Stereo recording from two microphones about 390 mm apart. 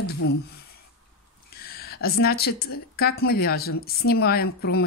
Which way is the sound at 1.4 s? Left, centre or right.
Left.